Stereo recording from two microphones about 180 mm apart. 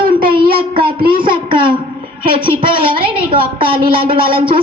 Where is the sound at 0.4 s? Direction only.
55° right (ahead or behind).